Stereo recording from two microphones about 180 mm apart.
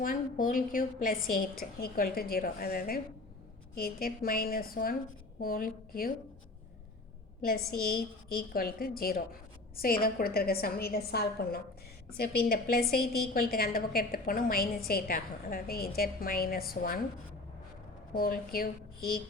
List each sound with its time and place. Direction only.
0.0 s a woman's voice: 50° left (ahead or behind)
7.4 s a woman's voice: 55° left (ahead or behind)
18.1 s a woman's voice: 55° left (ahead or behind)